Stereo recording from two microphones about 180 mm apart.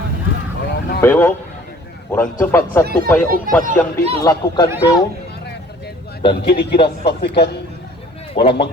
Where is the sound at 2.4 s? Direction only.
15° left (ahead or behind).